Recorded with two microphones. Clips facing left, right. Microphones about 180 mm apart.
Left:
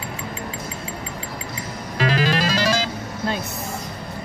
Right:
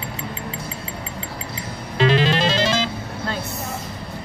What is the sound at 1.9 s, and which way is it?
Music, 25° right (ahead or behind).